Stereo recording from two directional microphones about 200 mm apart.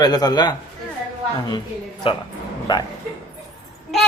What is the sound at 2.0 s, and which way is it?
Speech, 25° left (ahead or behind).